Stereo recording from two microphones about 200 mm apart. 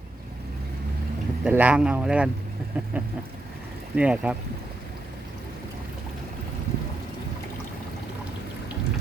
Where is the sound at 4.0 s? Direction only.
5° right (ahead or behind).